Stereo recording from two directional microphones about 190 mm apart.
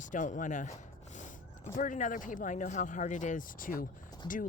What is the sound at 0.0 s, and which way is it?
Speech, 40° left (ahead or behind).